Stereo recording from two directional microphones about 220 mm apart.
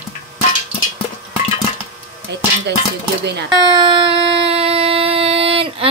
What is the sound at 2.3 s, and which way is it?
Dishes, 50° right (ahead or behind).